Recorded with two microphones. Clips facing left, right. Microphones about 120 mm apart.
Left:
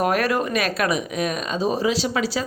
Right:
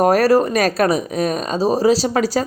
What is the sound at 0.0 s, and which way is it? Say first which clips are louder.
Speech: right 7 dB; 35° right (ahead or behind).